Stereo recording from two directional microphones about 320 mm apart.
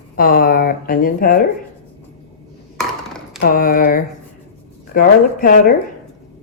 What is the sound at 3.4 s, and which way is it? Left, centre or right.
Speech, left.